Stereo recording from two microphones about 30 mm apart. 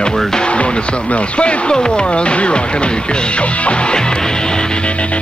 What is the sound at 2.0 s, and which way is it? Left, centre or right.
Speech, left.